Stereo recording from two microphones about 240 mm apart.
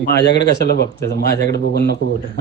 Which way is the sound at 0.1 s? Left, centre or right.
Left.